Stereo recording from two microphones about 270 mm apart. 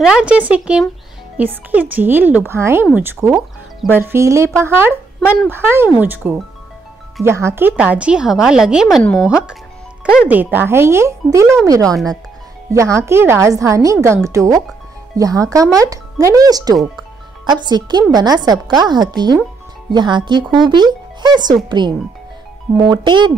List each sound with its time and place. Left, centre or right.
0.0 s a woman's voice: centre